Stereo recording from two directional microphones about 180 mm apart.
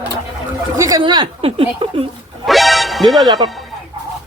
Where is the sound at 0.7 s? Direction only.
15° right (ahead or behind).